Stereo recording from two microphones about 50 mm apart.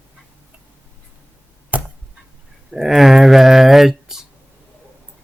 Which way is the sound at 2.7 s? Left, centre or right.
Centre.